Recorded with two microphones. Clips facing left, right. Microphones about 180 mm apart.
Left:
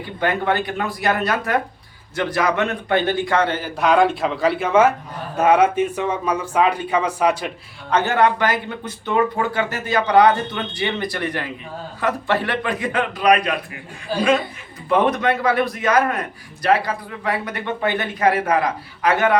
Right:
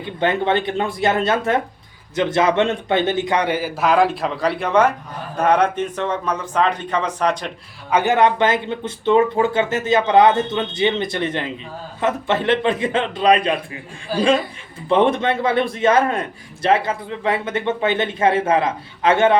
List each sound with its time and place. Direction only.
0.0 s a man's voice: 25° right (ahead or behind); by 7.5 s 5° left (ahead or behind)
7.9 s speech: 15° right (ahead or behind)
14.8 s speech: 25° right (ahead or behind)